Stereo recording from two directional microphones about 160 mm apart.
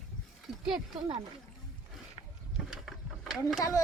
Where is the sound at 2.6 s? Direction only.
Centre (ahead or behind).